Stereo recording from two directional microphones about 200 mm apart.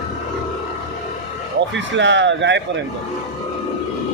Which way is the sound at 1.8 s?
65° right (ahead or behind).